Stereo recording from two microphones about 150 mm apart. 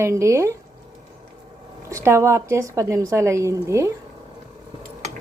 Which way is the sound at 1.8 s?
20° right (ahead or behind).